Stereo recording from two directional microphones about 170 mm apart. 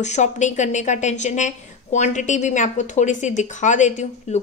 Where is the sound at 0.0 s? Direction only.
45° left (ahead or behind).